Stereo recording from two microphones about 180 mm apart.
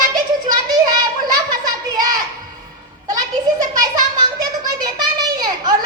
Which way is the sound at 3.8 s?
20° right (ahead or behind).